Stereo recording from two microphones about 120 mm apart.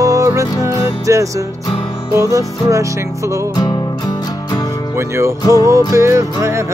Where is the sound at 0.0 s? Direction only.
25° right (ahead or behind).